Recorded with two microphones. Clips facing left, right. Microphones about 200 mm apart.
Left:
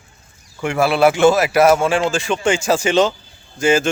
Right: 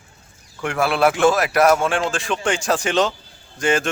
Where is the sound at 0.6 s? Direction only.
Centre (ahead or behind).